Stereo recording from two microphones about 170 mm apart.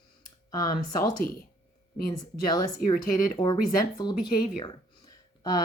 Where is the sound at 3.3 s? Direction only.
25° left (ahead or behind).